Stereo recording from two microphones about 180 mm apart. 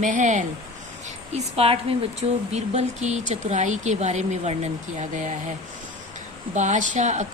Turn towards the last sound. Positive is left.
turn(degrees=-40)  # may be behind; listen again after turning